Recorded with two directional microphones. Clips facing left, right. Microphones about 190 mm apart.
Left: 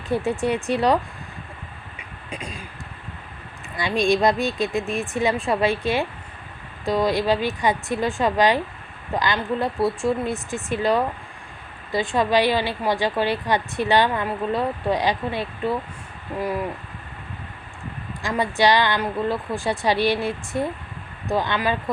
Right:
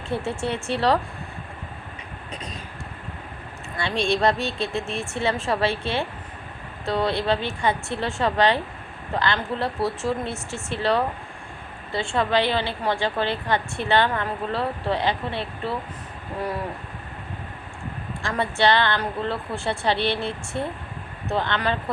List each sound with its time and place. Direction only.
0.2 s a woman's voice: 15° left (ahead or behind)
2.3 s a woman's voice: 10° left (ahead or behind)
3.8 s a woman's voice: 15° left (ahead or behind)
18.2 s a woman's voice: 15° left (ahead or behind)